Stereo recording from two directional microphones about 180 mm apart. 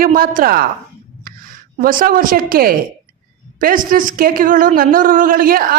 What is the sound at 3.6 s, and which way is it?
A woman's voice, 50° right (ahead or behind).